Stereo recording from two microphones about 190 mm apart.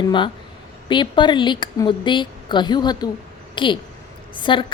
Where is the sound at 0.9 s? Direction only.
25° left (ahead or behind).